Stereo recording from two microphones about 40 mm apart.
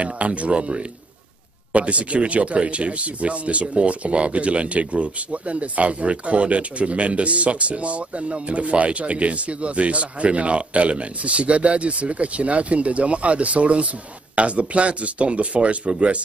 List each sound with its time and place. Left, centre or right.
0.0 s speech: right